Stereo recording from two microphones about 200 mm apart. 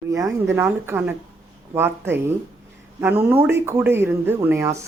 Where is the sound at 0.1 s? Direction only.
15° right (ahead or behind).